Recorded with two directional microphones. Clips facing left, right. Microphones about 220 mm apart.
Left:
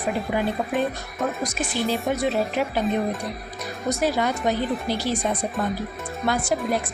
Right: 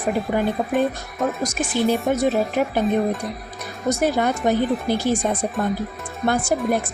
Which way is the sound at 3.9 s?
50° right (ahead or behind).